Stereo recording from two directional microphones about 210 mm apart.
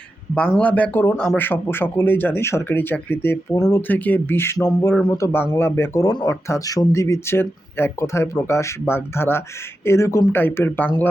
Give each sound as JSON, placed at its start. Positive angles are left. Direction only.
{"t": 0.3, "sound": "speech", "side_deg": 5}